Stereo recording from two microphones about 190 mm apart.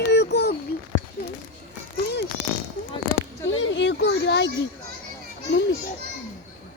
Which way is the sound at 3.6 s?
70° left (ahead or behind).